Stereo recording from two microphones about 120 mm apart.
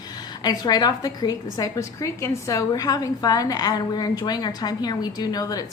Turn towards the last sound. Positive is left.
turn(degrees=30)  # may be behind; listen again after turning